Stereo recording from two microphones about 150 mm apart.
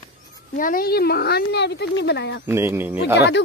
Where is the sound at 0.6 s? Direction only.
70° left (ahead or behind); by 1.6 s 90° left.